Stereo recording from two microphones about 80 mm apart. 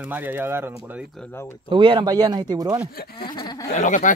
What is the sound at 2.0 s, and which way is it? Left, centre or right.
Speech, right.